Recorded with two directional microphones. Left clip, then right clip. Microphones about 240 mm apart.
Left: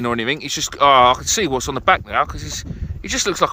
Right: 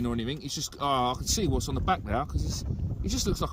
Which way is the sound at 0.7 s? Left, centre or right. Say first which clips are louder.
Left 16 dB; left.